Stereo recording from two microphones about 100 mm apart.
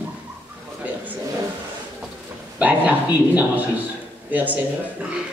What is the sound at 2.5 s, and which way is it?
A man's voice, 15° right (ahead or behind).